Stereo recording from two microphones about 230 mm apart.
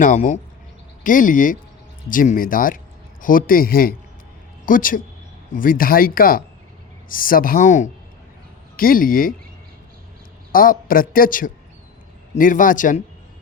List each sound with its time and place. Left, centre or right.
0.0 s a man's voice: left
10.5 s a man's voice: left